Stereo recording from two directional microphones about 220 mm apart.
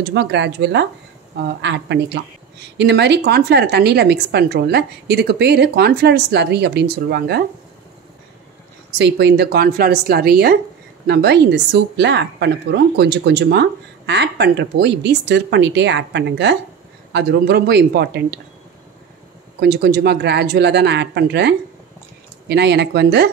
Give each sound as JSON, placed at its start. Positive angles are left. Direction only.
{"t": 0.0, "sound": "a woman's voice", "side_deg": -50}
{"t": 8.9, "sound": "a woman's voice", "side_deg": -50}
{"t": 19.6, "sound": "a woman's voice", "side_deg": -50}